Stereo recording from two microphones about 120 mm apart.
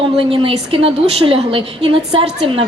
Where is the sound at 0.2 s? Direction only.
50° right (ahead or behind).